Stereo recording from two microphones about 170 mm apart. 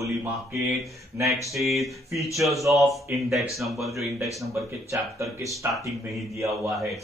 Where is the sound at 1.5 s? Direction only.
Centre (ahead or behind).